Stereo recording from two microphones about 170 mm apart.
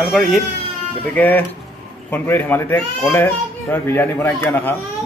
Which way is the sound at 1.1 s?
10° left (ahead or behind).